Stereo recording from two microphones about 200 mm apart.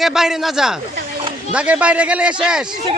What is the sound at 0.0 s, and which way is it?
Speech, centre (ahead or behind).